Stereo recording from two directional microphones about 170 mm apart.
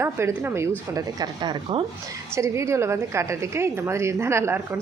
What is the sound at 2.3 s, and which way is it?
Speech, 15° right (ahead or behind).